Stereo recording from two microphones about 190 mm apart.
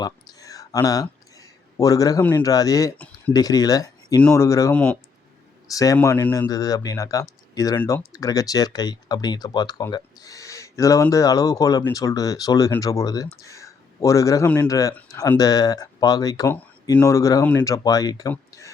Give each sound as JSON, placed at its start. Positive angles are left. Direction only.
{"t": 0.0, "sound": "speech", "side_deg": 20}